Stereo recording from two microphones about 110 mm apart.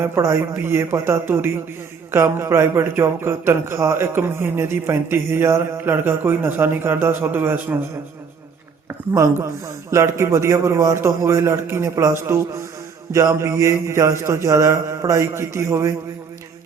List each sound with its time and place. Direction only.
0.0 s a man's voice: 25° right (ahead or behind)
9.1 s a man's voice: 25° right (ahead or behind)